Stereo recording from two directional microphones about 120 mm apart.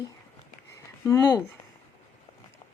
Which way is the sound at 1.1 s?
25° left (ahead or behind).